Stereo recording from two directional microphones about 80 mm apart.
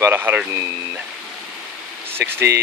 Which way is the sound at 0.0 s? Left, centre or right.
Right.